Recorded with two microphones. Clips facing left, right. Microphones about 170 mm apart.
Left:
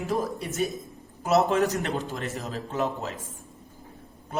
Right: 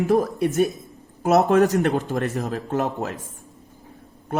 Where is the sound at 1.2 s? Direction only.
60° right (ahead or behind).